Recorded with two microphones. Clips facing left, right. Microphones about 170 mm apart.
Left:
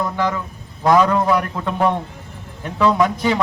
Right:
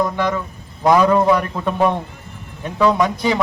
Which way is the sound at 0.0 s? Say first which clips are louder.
Right 2 dB; 15° right (ahead or behind).